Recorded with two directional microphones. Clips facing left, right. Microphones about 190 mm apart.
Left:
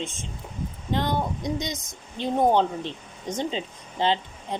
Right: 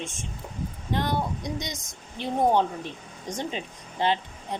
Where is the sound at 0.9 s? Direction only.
25° left (ahead or behind).